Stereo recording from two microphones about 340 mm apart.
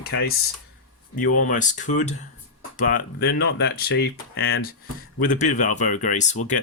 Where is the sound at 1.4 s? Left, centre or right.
Left.